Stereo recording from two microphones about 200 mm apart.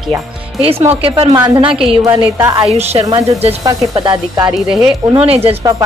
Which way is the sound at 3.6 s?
20° right (ahead or behind).